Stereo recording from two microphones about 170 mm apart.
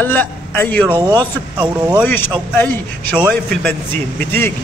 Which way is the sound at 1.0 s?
25° right (ahead or behind).